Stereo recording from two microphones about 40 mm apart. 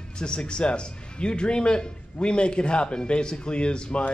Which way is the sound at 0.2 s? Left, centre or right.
Left.